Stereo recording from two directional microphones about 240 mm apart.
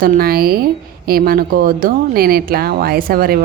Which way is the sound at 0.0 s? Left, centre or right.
Right.